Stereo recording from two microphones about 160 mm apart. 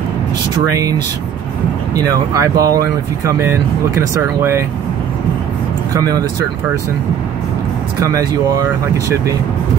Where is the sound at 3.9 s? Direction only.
15° right (ahead or behind).